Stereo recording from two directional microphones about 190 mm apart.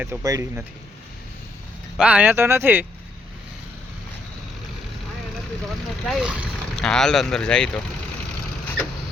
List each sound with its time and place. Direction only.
0.0 s speech: 15° right (ahead or behind)
2.0 s speech: 5° right (ahead or behind)
6.1 s speech: 5° right (ahead or behind)